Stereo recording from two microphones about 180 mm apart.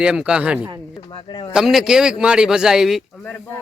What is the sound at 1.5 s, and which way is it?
A man's voice, centre (ahead or behind).